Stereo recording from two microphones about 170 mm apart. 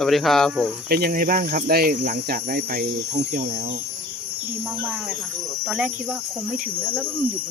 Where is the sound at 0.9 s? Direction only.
65° right (ahead or behind).